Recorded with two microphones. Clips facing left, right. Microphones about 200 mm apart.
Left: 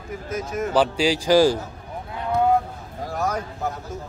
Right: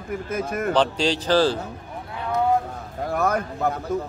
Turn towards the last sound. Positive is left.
turn(degrees=-60)  # may be behind; listen again after turning